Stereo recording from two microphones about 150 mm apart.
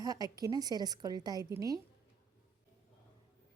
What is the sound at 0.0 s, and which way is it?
A woman's voice, 25° right (ahead or behind).